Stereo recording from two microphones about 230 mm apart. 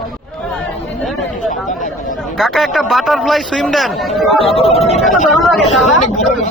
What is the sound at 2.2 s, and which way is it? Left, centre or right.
Speech, centre.